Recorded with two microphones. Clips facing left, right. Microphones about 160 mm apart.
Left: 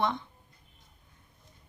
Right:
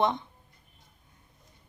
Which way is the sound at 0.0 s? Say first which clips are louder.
Right 3 dB; 20° right (ahead or behind).